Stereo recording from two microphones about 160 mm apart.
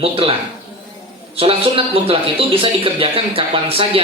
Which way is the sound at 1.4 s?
35° right (ahead or behind).